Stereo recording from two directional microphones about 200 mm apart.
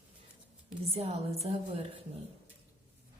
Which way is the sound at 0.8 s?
30° right (ahead or behind).